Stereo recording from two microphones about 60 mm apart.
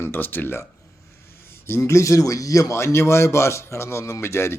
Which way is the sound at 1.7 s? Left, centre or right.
Left.